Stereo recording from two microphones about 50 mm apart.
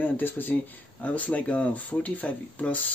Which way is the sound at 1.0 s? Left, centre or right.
Left.